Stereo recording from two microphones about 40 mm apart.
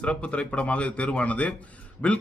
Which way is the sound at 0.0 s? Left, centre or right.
Left.